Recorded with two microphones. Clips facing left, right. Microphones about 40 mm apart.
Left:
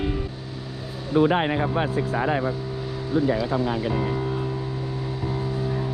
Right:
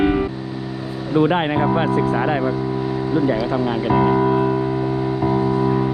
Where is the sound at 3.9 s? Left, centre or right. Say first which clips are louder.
Right 10 dB; right.